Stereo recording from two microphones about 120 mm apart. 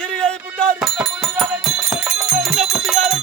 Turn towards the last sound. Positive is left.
turn(degrees=0)  # may be behind; listen again after turning